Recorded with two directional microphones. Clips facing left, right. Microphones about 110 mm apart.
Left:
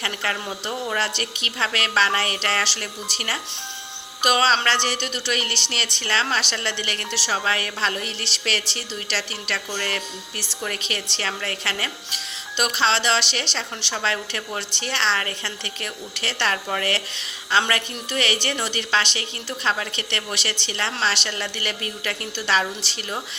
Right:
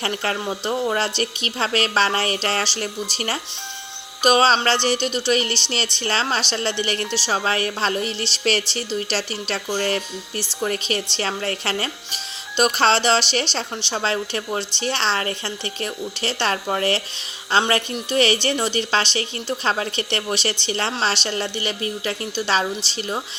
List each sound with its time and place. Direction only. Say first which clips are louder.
0.0 s speech: right 4 dB; 35° right (ahead or behind)